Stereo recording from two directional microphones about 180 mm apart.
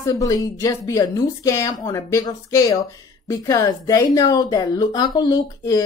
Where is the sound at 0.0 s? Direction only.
20° left (ahead or behind).